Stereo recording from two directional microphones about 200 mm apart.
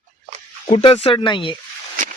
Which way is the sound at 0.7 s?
30° left (ahead or behind).